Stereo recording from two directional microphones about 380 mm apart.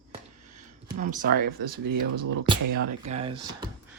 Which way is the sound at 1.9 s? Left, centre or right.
Right.